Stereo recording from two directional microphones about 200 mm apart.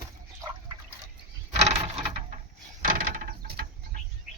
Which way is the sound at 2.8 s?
45° right (ahead or behind).